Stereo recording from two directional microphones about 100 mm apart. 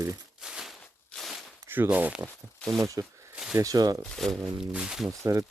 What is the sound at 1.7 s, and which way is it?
Speech, 20° right (ahead or behind).